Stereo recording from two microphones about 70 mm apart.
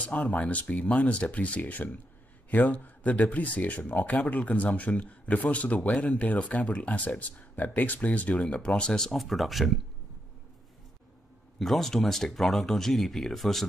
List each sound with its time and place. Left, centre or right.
0.0 s speech: centre
11.5 s speech: centre